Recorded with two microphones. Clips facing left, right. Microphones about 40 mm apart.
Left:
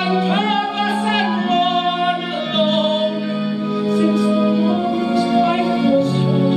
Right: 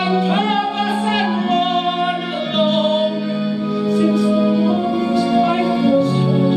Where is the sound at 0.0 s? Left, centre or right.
Centre.